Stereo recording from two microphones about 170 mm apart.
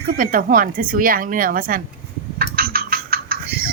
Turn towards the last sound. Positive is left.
turn(degrees=-60)  # may be behind; listen again after turning